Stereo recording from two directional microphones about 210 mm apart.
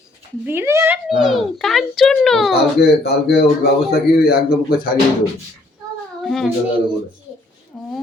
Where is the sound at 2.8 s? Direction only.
50° left (ahead or behind).